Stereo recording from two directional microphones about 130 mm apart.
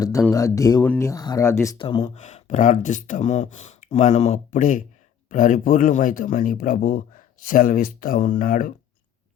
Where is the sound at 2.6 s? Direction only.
80° left.